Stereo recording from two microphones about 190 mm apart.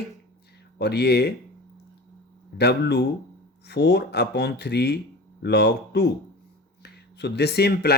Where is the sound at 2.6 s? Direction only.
60° left (ahead or behind).